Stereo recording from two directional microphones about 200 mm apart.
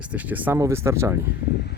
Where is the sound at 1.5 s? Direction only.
55° left (ahead or behind).